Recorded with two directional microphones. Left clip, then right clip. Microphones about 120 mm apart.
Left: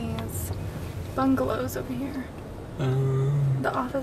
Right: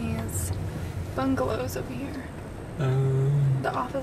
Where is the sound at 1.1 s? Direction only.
Centre (ahead or behind).